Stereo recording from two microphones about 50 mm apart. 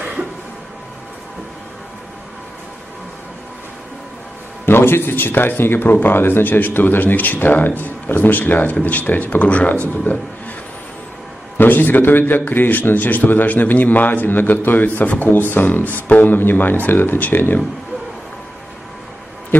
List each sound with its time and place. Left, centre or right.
4.6 s speech: left
11.5 s speech: left